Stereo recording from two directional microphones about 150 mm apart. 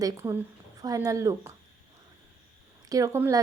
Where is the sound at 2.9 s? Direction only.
20° right (ahead or behind).